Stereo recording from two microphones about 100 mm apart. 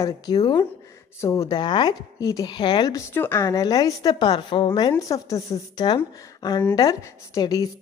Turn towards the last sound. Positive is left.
turn(degrees=40)  # may be behind; listen again after turning